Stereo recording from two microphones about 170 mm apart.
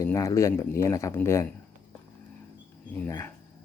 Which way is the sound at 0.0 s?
20° left (ahead or behind).